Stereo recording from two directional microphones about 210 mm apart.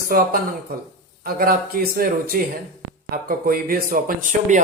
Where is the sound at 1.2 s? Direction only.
45° right (ahead or behind).